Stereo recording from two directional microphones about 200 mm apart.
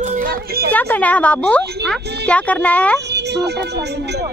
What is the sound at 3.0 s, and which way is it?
Speech, 55° right (ahead or behind).